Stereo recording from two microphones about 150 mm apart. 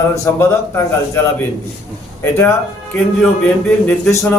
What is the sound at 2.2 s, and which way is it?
Speech, 15° left (ahead or behind).